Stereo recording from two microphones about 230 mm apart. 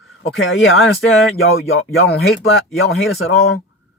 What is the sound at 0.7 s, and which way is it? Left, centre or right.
Speech, centre.